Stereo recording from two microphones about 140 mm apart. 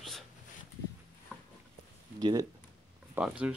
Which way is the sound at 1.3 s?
10° right (ahead or behind).